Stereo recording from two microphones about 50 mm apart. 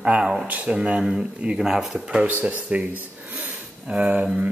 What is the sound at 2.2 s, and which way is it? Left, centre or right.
Speech, right.